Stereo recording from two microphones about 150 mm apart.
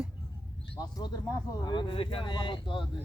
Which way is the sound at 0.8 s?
25° left (ahead or behind).